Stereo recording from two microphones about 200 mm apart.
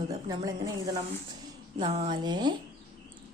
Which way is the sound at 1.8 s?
30° right (ahead or behind).